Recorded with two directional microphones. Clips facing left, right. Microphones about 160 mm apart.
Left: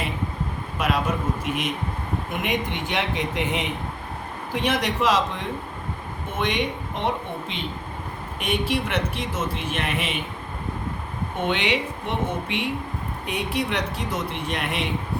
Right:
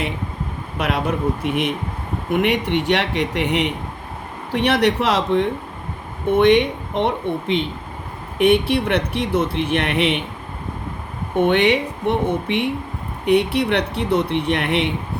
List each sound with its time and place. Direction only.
0.8 s speech: 65° right (ahead or behind)
11.3 s speech: 55° right (ahead or behind)